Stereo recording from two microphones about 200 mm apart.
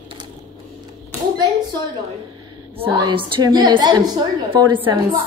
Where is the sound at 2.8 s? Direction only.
20° right (ahead or behind).